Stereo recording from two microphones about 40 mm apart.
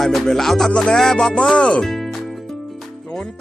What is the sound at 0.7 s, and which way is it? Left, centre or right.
Speech, left.